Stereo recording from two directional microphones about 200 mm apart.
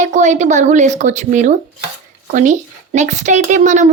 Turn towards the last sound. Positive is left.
turn(degrees=-35)  # may be behind; listen again after turning